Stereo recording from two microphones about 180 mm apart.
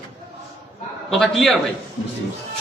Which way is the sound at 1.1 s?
Centre (ahead or behind).